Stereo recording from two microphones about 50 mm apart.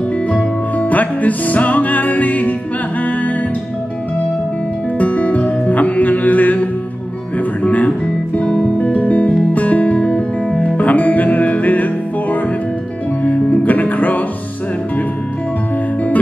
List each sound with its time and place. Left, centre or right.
0.7 s music: left
4.9 s music: left
7.6 s speech: left
8.4 s music: left